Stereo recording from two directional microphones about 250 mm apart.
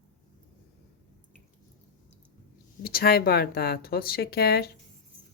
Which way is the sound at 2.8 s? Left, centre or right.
Left.